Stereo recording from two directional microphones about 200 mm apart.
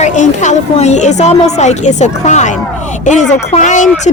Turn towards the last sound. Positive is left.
turn(degrees=40)  # may be behind; listen again after turning